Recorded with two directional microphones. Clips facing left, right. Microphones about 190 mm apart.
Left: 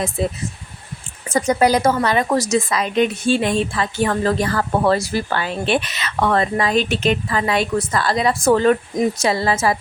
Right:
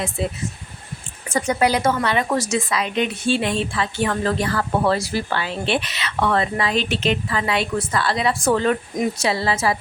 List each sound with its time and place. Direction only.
0.2 s speech: 40° left (ahead or behind)